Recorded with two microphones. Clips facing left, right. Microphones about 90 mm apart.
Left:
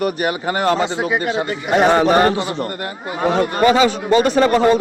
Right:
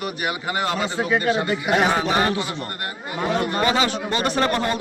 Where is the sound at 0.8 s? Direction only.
20° left (ahead or behind).